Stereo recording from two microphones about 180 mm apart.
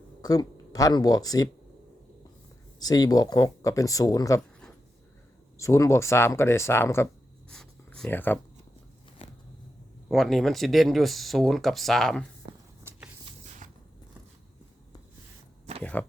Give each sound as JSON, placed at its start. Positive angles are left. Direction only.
{"t": 0.2, "sound": "speech", "side_deg": 20}
{"t": 2.8, "sound": "speech", "side_deg": 20}
{"t": 5.5, "sound": "speech", "side_deg": 15}
{"t": 7.5, "sound": "writing", "side_deg": 5}
{"t": 10.1, "sound": "speech", "side_deg": 0}
{"t": 13.6, "sound": "a sound", "side_deg": -45}
{"t": 15.8, "sound": "speech", "side_deg": 10}